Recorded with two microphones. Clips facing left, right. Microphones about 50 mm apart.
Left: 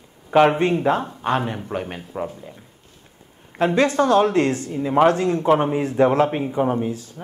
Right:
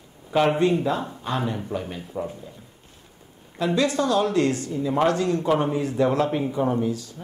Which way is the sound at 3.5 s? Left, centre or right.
Left.